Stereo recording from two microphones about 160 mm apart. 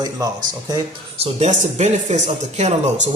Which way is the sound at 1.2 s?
45° right (ahead or behind).